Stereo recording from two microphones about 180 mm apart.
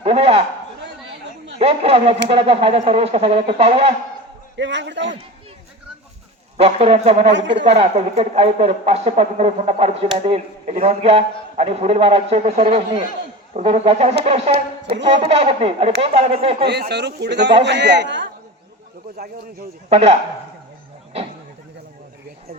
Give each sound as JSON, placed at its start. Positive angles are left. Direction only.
{"t": 0.0, "sound": "a man's voice", "side_deg": -35}
{"t": 1.5, "sound": "speech", "side_deg": -35}
{"t": 4.5, "sound": "a man's voice", "side_deg": -80}
{"t": 6.6, "sound": "speech", "side_deg": -35}
{"t": 7.3, "sound": "a man's voice", "side_deg": -80}
{"t": 7.6, "sound": "speech", "side_deg": -35}
{"t": 14.5, "sound": "speech", "side_deg": -70}
{"t": 15.3, "sound": "speech", "side_deg": -35}
{"t": 16.6, "sound": "a man's voice", "side_deg": -65}
{"t": 19.9, "sound": "speech", "side_deg": -35}